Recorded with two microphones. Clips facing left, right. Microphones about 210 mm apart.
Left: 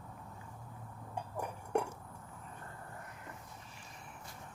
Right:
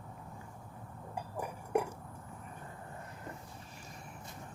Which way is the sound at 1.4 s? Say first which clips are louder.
Right 2 dB; 5° right (ahead or behind).